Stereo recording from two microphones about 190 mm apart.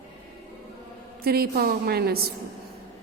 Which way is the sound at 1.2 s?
55° right (ahead or behind).